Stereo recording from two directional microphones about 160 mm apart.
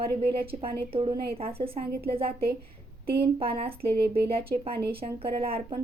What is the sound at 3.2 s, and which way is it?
Speech, 35° right (ahead or behind).